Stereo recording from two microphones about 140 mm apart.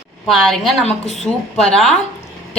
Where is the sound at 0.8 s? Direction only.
50° left (ahead or behind).